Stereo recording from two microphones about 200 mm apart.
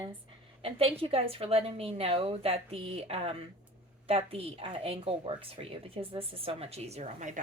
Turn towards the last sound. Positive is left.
turn(degrees=-35)  # may be behind; listen again after turning